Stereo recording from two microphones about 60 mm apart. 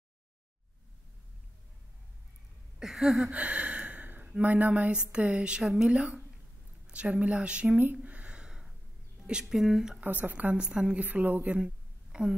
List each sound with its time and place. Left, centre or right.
2.8 s a sound: centre
3.3 s gasp: right
4.4 s a woman's voice: right; by 9.9 s centre
9.9 s speech: right; by 11.1 s centre
11.1 s a woman's voice: right